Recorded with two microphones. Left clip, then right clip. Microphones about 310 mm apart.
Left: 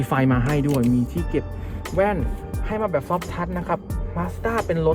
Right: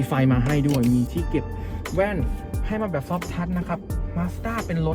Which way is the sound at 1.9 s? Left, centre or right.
Left.